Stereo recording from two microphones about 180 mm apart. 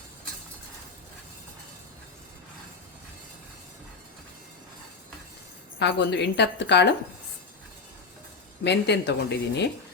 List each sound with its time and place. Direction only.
5.8 s a woman's voice: 75° left (ahead or behind)
8.6 s a woman's voice: 70° left (ahead or behind)